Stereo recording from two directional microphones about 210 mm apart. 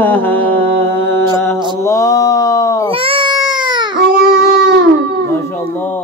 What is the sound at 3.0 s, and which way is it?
Baby cry, 25° right (ahead or behind).